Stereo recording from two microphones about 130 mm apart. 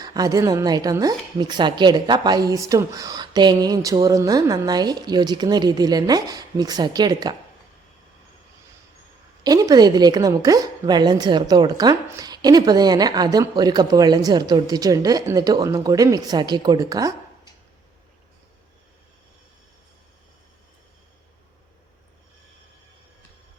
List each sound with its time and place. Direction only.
0.0 s speech: 30° right (ahead or behind)
9.4 s speech: 30° right (ahead or behind)